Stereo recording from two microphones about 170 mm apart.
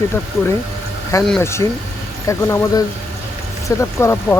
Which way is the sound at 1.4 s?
15° left (ahead or behind).